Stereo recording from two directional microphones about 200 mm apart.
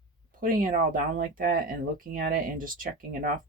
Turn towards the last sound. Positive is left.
turn(degrees=-45)  # may be behind; listen again after turning